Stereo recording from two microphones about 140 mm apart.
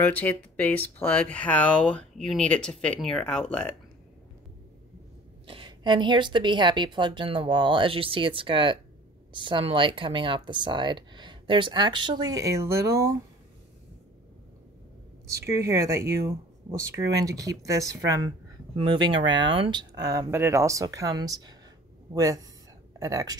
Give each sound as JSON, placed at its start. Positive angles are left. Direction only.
{"t": 0.1, "sound": "speech", "side_deg": 10}
{"t": 5.5, "sound": "speech", "side_deg": -35}
{"t": 15.2, "sound": "speech", "side_deg": -20}